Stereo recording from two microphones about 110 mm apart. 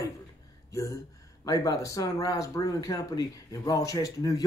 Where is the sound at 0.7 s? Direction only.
30° left (ahead or behind).